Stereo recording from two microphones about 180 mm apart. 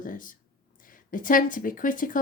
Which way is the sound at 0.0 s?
50° left (ahead or behind).